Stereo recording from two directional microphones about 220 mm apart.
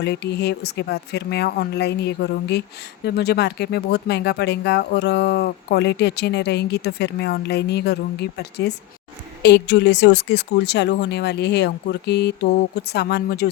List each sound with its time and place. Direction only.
0.0 s speech: 50° left (ahead or behind)